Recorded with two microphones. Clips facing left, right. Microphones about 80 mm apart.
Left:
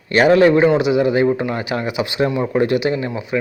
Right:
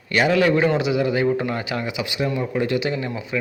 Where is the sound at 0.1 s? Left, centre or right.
Left.